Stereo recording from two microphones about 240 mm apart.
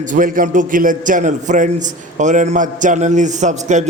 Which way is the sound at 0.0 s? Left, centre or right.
Right.